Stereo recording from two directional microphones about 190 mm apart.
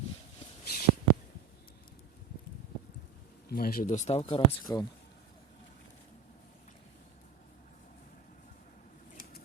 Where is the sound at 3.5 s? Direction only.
50° left (ahead or behind); by 4.4 s 30° left (ahead or behind).